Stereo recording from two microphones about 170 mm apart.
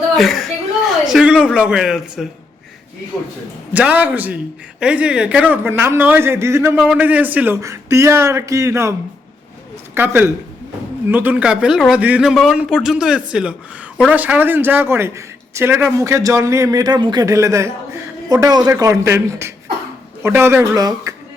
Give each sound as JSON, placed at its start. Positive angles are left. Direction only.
{"t": 0.2, "sound": "speech", "side_deg": 0}
{"t": 3.7, "sound": "a man's voice", "side_deg": -10}